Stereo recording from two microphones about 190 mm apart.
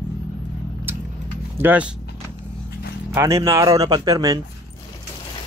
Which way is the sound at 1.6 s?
5° right (ahead or behind).